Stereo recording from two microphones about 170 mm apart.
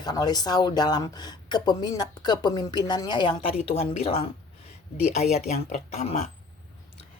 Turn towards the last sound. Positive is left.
turn(degrees=40)  # may be behind; listen again after turning